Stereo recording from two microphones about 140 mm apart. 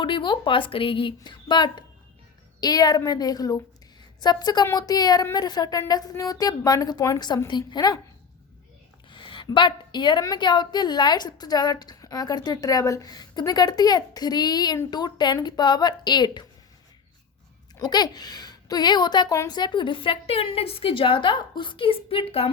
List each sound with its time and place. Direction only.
0.0 s a woman's voice: 35° left (ahead or behind)
9.0 s a woman's voice: 35° left (ahead or behind)
17.7 s a woman's voice: 30° left (ahead or behind)